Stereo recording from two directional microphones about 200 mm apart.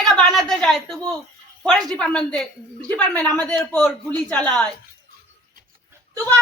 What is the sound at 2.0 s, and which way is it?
Speech, 5° left (ahead or behind).